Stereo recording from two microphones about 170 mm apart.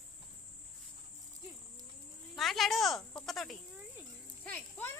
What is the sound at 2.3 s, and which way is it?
A child's voice, centre (ahead or behind).